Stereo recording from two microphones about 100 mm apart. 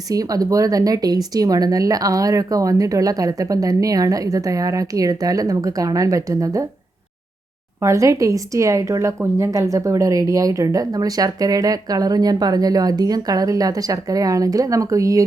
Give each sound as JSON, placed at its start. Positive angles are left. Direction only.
{"t": 0.1, "sound": "speech", "side_deg": -40}
{"t": 7.8, "sound": "speech", "side_deg": -30}